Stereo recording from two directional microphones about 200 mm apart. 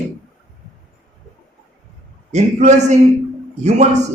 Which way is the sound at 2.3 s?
35° right (ahead or behind).